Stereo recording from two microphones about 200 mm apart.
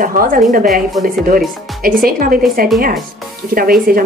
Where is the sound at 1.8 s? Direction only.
45° right (ahead or behind).